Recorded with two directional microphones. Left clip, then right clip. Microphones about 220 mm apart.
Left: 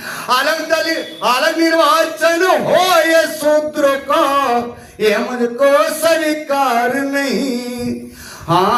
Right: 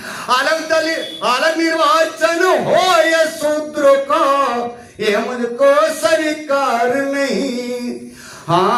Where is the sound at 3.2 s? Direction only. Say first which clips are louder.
Left 4 dB; 35° left (ahead or behind).